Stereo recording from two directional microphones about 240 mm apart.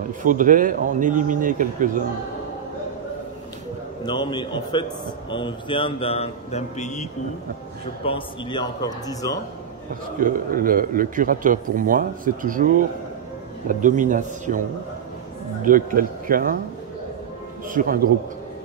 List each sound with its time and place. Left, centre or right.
0.2 s a man's voice: right
4.0 s a man's voice: centre
10.2 s a man's voice: right
15.6 s a man's voice: right
17.6 s a man's voice: right